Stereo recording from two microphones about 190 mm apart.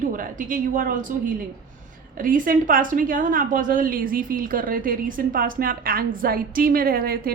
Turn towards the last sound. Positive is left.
turn(degrees=-50)  # may be behind; listen again after turning